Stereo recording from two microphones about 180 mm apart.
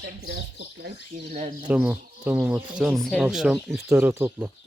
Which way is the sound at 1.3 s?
40° right (ahead or behind).